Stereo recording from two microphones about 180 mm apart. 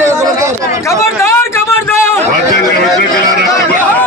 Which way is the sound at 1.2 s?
15° left (ahead or behind).